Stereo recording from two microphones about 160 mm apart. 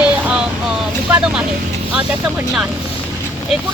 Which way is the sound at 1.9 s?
5° right (ahead or behind).